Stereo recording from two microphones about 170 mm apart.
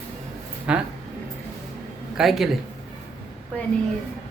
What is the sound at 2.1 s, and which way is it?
Speech, centre (ahead or behind).